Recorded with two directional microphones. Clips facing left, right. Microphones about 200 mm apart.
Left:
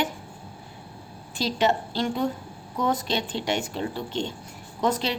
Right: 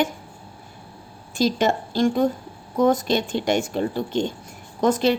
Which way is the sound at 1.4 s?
45° right (ahead or behind).